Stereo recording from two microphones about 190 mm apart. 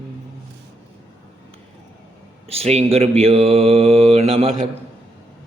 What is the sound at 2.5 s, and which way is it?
Mantra, 30° right (ahead or behind).